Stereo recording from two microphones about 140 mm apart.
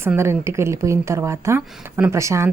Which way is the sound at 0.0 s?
20° right (ahead or behind).